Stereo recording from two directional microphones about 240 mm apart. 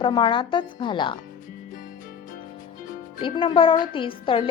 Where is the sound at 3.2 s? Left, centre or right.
Left.